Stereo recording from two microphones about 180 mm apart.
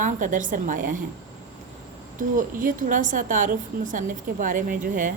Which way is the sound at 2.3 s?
50° right (ahead or behind).